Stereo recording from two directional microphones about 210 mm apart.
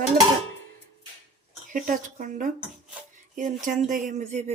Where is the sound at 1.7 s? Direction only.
40° right (ahead or behind).